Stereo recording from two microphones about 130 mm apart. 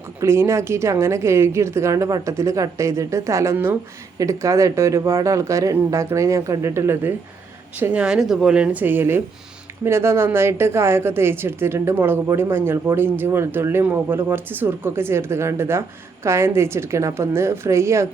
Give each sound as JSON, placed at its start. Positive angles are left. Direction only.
{"t": 0.2, "sound": "a woman's voice", "side_deg": -20}